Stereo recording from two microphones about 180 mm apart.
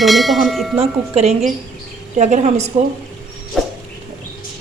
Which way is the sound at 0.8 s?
35° right (ahead or behind).